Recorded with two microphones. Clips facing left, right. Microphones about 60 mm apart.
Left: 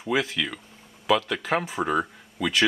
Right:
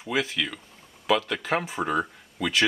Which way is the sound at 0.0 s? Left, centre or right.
Centre.